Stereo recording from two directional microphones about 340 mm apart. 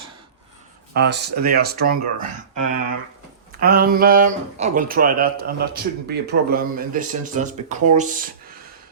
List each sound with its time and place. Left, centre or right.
0.9 s speech: right
3.6 s speech: right